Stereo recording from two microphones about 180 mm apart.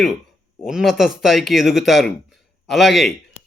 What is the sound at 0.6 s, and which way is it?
A man's voice, 5° right (ahead or behind).